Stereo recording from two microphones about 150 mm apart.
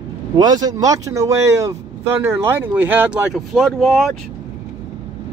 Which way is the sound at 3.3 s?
Centre (ahead or behind).